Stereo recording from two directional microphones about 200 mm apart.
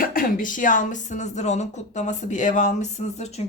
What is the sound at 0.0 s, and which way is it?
Speech, 45° left (ahead or behind).